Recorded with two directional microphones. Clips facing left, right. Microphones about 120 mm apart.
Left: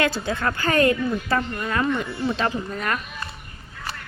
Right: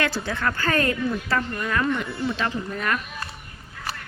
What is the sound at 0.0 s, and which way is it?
Speech, 25° left (ahead or behind).